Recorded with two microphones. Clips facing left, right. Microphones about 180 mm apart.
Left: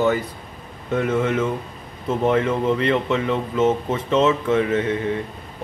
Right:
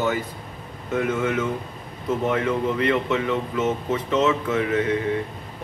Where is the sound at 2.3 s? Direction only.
25° left (ahead or behind).